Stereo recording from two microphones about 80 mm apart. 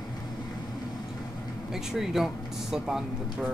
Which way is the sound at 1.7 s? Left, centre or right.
Centre.